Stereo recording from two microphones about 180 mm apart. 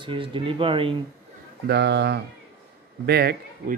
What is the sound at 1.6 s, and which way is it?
Speech, 65° right (ahead or behind).